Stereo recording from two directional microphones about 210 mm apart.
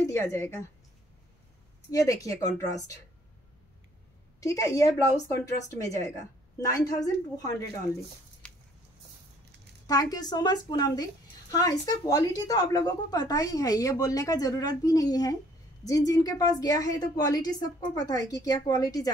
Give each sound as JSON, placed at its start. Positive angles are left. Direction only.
{"t": 0.0, "sound": "speech", "side_deg": 15}
{"t": 1.9, "sound": "speech", "side_deg": 15}
{"t": 4.4, "sound": "speech", "side_deg": 15}
{"t": 8.4, "sound": "a sound", "side_deg": 5}
{"t": 9.8, "sound": "a woman's voice", "side_deg": 20}